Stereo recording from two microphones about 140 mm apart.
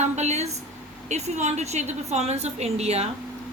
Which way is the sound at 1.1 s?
55° right (ahead or behind).